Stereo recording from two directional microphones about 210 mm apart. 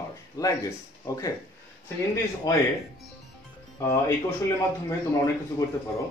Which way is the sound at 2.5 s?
15° left (ahead or behind).